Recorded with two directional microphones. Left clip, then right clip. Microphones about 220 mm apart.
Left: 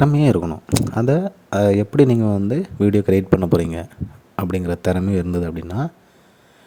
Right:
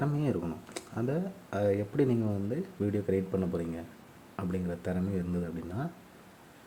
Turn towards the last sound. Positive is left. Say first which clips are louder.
# left 13 dB
turn(degrees=45)  # may be behind; listen again after turning